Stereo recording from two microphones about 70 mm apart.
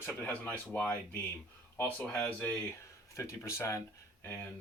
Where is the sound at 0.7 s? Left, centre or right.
Left.